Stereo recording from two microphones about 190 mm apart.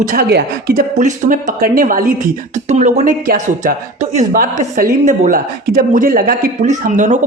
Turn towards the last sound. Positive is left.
turn(degrees=-40)  # may be behind; listen again after turning